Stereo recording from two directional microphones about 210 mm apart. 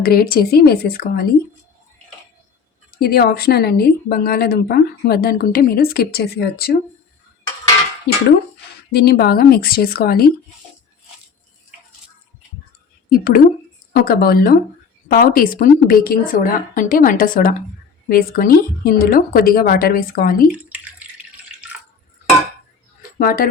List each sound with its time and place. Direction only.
0.0 s a woman's voice: 45° left (ahead or behind)
3.0 s a woman's voice: 45° left (ahead or behind)
8.9 s a woman's voice: 50° left (ahead or behind)
13.1 s a woman's voice: 45° left (ahead or behind)
23.1 s speech: 40° left (ahead or behind)